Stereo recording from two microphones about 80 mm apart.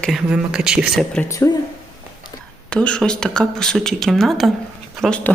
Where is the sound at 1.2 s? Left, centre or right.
Centre.